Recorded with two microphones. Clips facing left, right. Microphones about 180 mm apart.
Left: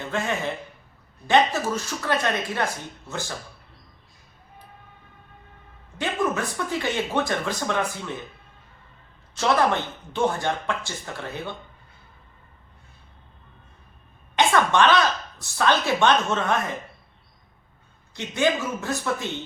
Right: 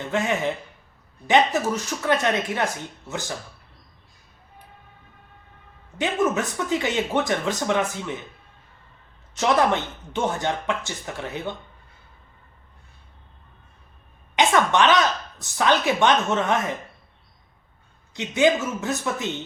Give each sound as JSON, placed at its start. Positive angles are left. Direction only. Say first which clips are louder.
{"t": 0.1, "sound": "speech", "louder": "right 3 dB", "side_deg": -15}
{"t": 6.0, "sound": "speech", "louder": "right 3 dB", "side_deg": -20}
{"t": 9.3, "sound": "speech", "louder": "right 1 dB", "side_deg": -20}
{"t": 14.3, "sound": "a sound", "louder": "even", "side_deg": -15}
{"t": 15.4, "sound": "speech", "louder": "right 1 dB", "side_deg": -20}
{"t": 18.1, "sound": "speech", "louder": "right 4 dB", "side_deg": -15}